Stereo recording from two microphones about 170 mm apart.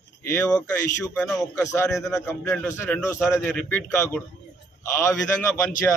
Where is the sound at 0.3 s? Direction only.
15° left (ahead or behind).